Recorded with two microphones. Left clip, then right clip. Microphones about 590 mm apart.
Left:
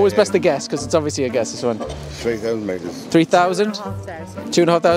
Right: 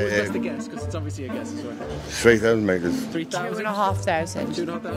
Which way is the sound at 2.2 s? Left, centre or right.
Right.